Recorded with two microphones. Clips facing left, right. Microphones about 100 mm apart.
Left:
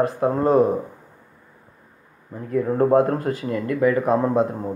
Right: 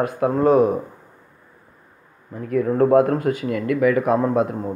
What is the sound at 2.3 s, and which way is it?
Speech, 25° left (ahead or behind).